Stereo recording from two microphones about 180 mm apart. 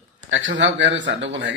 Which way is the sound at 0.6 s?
85° right.